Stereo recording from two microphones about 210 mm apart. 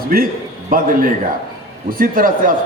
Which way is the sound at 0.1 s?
45° right (ahead or behind).